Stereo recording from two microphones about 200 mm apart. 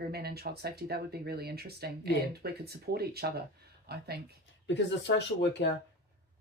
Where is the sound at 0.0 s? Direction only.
50° right (ahead or behind).